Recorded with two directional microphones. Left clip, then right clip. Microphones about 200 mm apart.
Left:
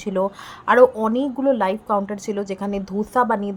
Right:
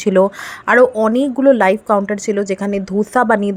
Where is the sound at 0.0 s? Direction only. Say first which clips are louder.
Right 10 dB; 30° right (ahead or behind).